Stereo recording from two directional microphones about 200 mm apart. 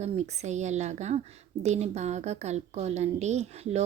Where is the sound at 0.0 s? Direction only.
35° right (ahead or behind).